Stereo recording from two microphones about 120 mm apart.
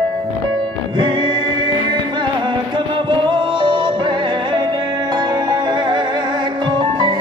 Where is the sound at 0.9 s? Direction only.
40° right (ahead or behind).